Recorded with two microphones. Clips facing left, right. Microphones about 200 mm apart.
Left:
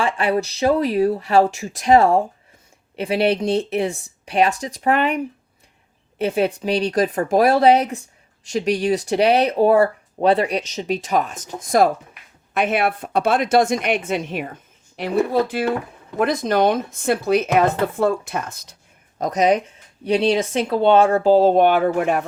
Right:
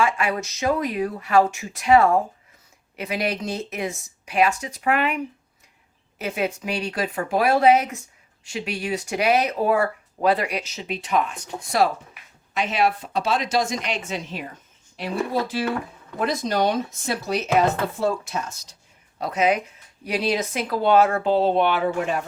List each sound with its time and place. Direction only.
0.0 s speech: 35° left (ahead or behind)
12.5 s speech: 55° left (ahead or behind)
19.2 s speech: 40° left (ahead or behind); by 22.2 s 55° left (ahead or behind)